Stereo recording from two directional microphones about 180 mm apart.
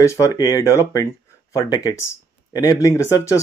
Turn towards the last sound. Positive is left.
turn(degrees=15)  # may be behind; listen again after turning